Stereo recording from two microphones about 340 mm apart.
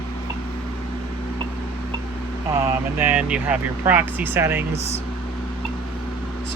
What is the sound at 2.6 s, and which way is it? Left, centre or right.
Speech, centre.